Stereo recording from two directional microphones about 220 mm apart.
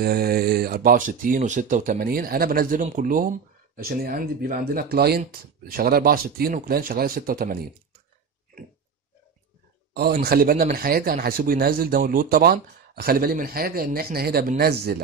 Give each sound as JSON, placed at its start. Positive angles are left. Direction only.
{"t": 0.0, "sound": "speech", "side_deg": -45}
{"t": 10.2, "sound": "speech", "side_deg": -45}